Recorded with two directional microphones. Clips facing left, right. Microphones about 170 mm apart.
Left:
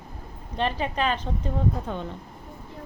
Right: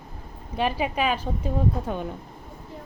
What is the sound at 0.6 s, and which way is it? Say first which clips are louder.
A woman's voice: right 1 dB; 10° right (ahead or behind).